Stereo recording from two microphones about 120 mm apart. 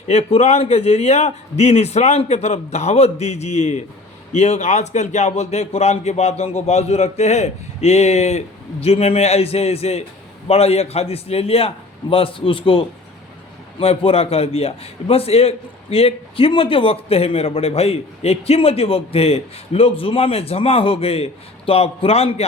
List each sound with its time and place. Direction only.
0.1 s a man's voice: 60° left (ahead or behind)